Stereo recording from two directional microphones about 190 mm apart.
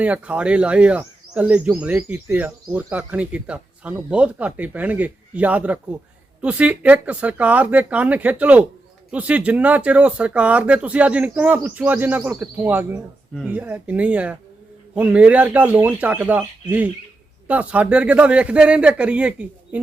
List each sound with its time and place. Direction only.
0.0 s speech: 5° right (ahead or behind)